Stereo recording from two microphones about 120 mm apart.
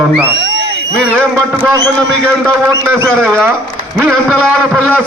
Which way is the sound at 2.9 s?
15° right (ahead or behind).